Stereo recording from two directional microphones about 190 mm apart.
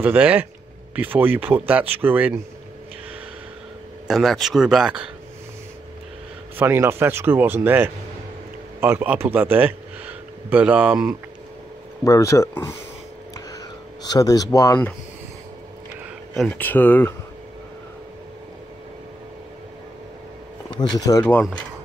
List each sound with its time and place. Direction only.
0.0 s speech: 10° right (ahead or behind)
4.1 s speech: centre (ahead or behind)
6.5 s speech: 10° right (ahead or behind)
12.0 s speech: 15° left (ahead or behind)
14.0 s speech: 20° left (ahead or behind)
16.3 s speech: 5° left (ahead or behind)
20.7 s speech: 20° left (ahead or behind)